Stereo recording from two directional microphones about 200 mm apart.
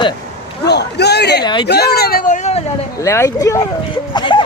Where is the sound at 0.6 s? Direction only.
55° left (ahead or behind).